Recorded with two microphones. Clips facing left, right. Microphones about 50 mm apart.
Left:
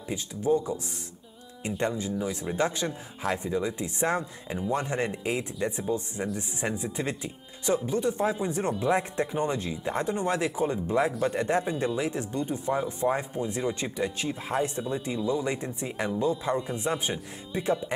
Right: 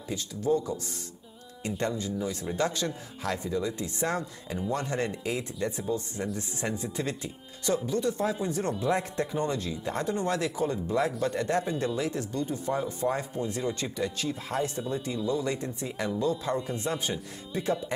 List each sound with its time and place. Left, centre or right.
0.1 s speech: centre